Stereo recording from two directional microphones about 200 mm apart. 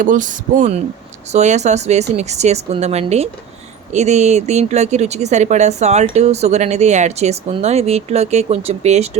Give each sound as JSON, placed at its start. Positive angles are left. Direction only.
{"t": 0.0, "sound": "speech", "side_deg": -40}